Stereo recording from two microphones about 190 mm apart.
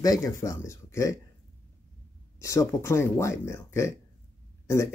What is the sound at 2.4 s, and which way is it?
Speech, 15° left (ahead or behind).